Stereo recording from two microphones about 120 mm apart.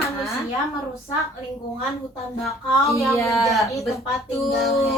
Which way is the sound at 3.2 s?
25° left (ahead or behind).